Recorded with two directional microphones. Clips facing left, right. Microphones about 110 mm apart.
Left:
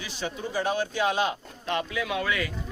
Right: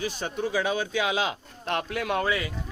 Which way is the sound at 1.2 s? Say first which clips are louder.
Left 2 dB; 80° right.